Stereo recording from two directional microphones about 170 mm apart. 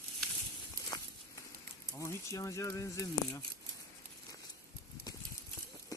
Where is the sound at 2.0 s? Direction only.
20° left (ahead or behind).